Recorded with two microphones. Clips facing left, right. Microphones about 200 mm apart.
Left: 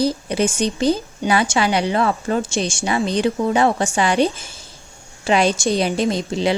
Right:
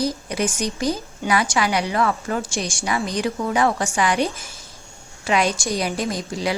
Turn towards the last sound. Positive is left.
turn(degrees=25)  # may be behind; listen again after turning